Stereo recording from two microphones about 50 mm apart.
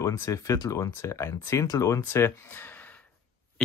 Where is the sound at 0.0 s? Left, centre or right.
Left.